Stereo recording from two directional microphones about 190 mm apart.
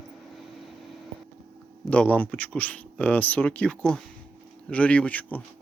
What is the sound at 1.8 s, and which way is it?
Speech, 5° left (ahead or behind).